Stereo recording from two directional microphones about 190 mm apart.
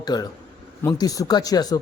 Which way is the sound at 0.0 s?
20° left (ahead or behind).